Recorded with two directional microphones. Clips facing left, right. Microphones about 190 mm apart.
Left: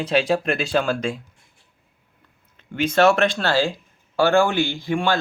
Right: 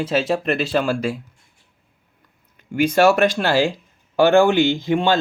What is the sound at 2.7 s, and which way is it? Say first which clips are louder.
Speech: right 2 dB; 10° right (ahead or behind).